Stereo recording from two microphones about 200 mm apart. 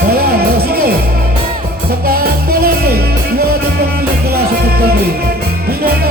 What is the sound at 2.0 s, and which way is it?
Music, 50° right (ahead or behind).